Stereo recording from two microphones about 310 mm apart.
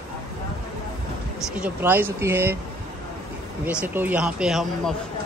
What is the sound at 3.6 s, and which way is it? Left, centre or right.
Speech, centre.